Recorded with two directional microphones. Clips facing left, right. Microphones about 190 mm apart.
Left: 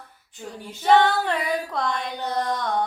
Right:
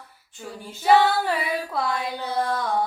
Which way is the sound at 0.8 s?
5° right (ahead or behind).